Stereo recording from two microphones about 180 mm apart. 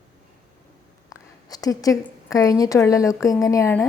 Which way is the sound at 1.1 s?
20° left (ahead or behind).